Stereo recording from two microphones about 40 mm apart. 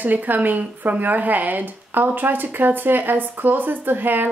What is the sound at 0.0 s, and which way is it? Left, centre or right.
A woman's voice, right.